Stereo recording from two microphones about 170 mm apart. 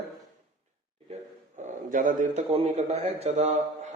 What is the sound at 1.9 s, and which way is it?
A man's voice, 50° right (ahead or behind).